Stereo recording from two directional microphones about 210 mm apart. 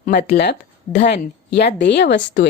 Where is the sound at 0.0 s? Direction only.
50° left (ahead or behind).